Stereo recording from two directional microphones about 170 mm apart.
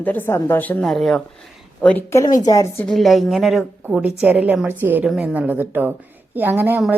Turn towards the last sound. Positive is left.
turn(degrees=-10)  # may be behind; listen again after turning